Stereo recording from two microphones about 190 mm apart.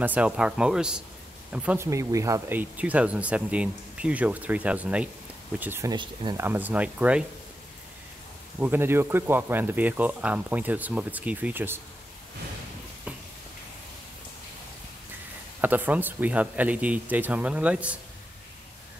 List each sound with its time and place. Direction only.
0.0 s speech: 10° right (ahead or behind)
5.9 s speech: 25° right (ahead or behind)
6.4 s speech: 10° right (ahead or behind)
8.5 s speech: 10° right (ahead or behind)
15.6 s speech: 10° right (ahead or behind)